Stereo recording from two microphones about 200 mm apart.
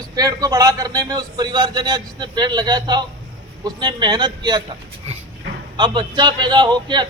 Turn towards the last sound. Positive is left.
turn(degrees=-20)  # may be behind; listen again after turning